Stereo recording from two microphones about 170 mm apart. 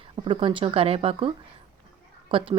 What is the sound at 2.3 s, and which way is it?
Speech, 30° right (ahead or behind).